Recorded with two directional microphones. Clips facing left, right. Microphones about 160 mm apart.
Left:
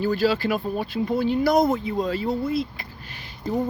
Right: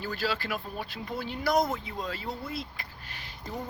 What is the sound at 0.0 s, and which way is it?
Speech, 15° left (ahead or behind).